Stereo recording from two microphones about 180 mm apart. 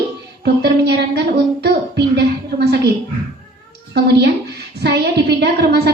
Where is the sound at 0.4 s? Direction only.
65° right (ahead or behind).